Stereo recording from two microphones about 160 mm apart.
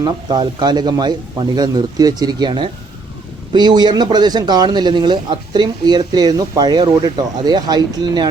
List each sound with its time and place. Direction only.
0.0 s a man's voice: 25° right (ahead or behind)